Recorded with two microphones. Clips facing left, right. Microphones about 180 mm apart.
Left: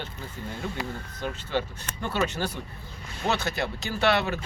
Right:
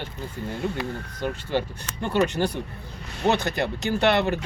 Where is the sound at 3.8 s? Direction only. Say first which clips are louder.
Right 8 dB; 55° right (ahead or behind).